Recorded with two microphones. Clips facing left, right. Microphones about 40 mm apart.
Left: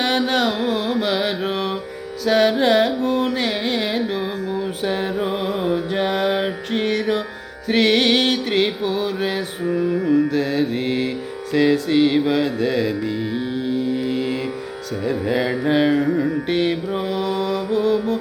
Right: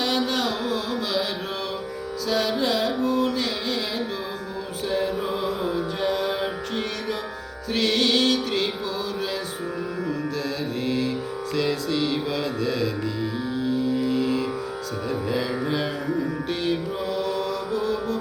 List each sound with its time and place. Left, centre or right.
0.0 s carnatic music: left
4.8 s music: left
9.6 s mantra: left
11.5 s music: left
15.0 s carnatic music: left